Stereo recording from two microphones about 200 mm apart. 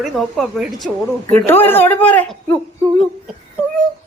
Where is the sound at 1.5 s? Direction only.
10° left (ahead or behind).